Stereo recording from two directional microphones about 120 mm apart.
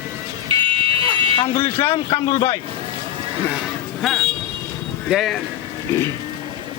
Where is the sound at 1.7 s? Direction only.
20° left (ahead or behind).